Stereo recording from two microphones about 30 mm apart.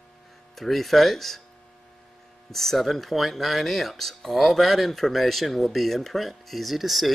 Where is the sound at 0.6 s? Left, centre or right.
Centre.